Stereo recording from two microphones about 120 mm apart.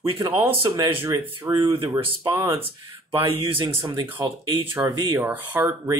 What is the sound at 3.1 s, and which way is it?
Speech, 45° right (ahead or behind).